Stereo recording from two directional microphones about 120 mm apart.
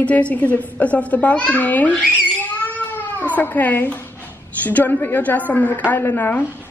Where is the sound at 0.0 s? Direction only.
10° left (ahead or behind).